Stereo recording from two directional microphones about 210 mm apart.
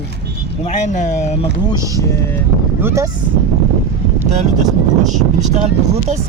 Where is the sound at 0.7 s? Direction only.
35° left (ahead or behind).